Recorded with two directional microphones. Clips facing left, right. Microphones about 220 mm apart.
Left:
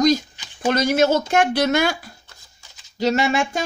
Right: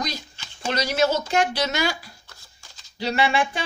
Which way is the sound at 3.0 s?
45° left (ahead or behind).